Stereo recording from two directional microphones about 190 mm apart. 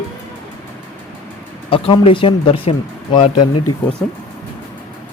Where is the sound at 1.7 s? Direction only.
30° left (ahead or behind).